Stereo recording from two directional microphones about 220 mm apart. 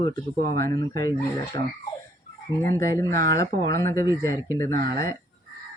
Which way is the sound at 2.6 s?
15° left (ahead or behind).